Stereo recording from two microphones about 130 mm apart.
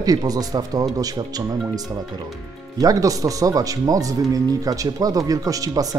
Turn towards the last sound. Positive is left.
turn(degrees=-25)  # may be behind; listen again after turning